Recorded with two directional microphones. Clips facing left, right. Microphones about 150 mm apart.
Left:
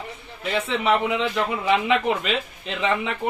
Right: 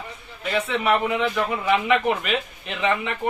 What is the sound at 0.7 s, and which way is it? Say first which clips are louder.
Speech: left 1 dB; 20° left (ahead or behind).